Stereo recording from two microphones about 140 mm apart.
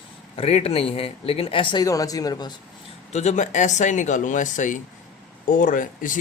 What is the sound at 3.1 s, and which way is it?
Speech, 55° left (ahead or behind).